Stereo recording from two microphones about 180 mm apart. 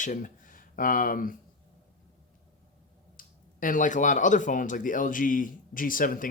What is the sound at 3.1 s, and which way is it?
Speech, 50° left (ahead or behind).